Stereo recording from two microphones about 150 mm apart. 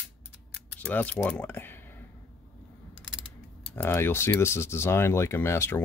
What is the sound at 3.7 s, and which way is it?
Speech, 15° left (ahead or behind).